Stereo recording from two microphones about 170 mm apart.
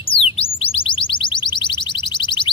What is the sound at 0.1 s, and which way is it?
Bird, 35° left (ahead or behind).